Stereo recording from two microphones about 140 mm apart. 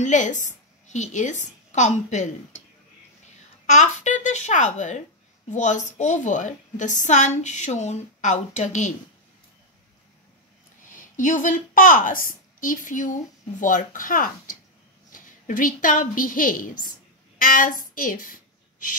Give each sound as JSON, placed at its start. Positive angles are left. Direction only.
{"t": 0.0, "sound": "a woman's voice", "side_deg": 60}
{"t": 3.6, "sound": "a woman's voice", "side_deg": 60}
{"t": 10.9, "sound": "a woman's voice", "side_deg": 70}